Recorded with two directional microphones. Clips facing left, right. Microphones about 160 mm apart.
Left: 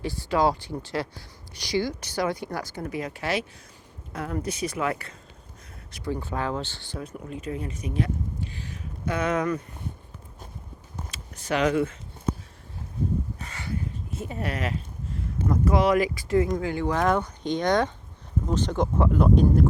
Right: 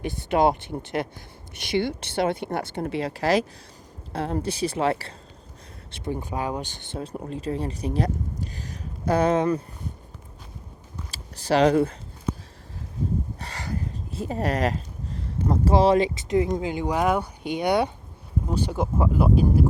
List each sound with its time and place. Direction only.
0.0 s speech: 20° right (ahead or behind)
5.9 s speech: 20° right (ahead or behind)
11.1 s speech: 35° right (ahead or behind)
13.4 s speech: 35° right (ahead or behind); by 19.6 s 5° right (ahead or behind)